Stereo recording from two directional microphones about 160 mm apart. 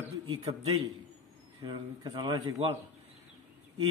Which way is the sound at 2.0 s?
30° right (ahead or behind).